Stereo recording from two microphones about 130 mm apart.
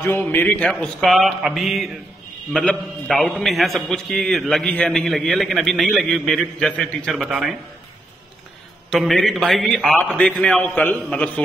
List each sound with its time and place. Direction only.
0.0 s a man's voice: 15° left (ahead or behind); by 7.5 s 5° right (ahead or behind)
8.9 s a man's voice: centre (ahead or behind)